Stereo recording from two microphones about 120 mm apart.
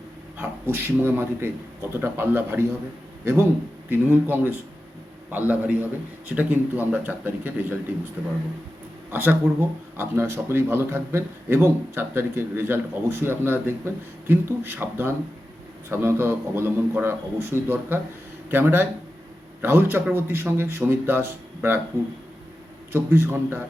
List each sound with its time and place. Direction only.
0.3 s a man's voice: 20° right (ahead or behind)
3.8 s speech: 15° right (ahead or behind)
9.1 s a man's voice: 15° right (ahead or behind)
22.9 s a man's voice: 20° right (ahead or behind)